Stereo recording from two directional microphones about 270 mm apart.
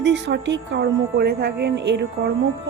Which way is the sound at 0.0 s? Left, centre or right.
Right.